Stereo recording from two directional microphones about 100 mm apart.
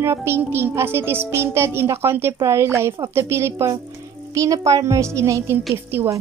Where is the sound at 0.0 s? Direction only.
25° right (ahead or behind).